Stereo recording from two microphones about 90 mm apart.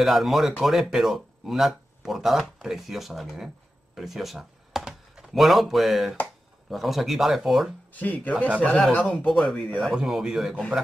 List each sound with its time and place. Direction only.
0.0 s speech: centre (ahead or behind)
7.9 s speech: 20° left (ahead or behind); by 10.5 s centre (ahead or behind)